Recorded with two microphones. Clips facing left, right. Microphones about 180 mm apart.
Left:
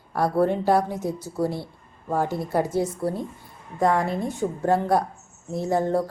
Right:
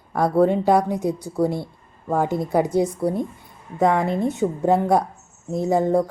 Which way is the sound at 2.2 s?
20° right (ahead or behind).